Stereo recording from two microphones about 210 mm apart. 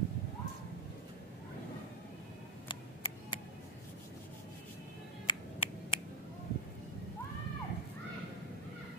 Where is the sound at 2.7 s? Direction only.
25° left (ahead or behind).